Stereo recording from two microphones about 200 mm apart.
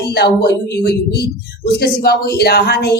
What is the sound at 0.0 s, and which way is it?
Speech, 55° left (ahead or behind).